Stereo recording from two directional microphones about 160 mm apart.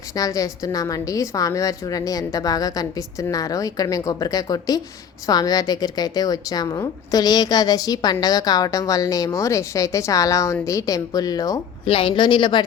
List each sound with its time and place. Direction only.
0.2 s a woman's voice: 20° left (ahead or behind)
11.9 s a woman's voice: 35° left (ahead or behind)